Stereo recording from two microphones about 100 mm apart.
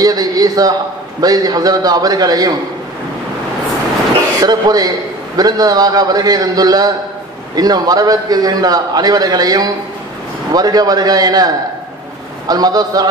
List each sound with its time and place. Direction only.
0.0 s a sound: 40° right (ahead or behind)
1.2 s a man's voice: 40° right (ahead or behind)
4.4 s a man's voice: 40° right (ahead or behind)